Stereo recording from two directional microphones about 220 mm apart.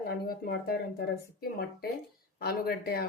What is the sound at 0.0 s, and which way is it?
Speech, 45° left (ahead or behind).